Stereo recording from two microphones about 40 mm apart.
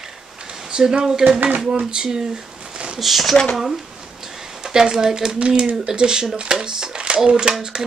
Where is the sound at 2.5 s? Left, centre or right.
Right.